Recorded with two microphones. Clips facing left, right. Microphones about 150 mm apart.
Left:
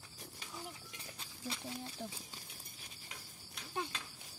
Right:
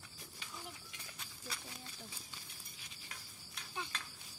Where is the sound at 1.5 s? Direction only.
25° left (ahead or behind).